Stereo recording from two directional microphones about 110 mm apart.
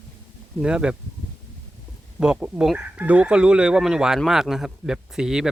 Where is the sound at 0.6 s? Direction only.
10° right (ahead or behind).